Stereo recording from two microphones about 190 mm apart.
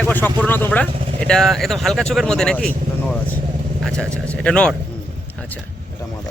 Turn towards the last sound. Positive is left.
turn(degrees=5)  # may be behind; listen again after turning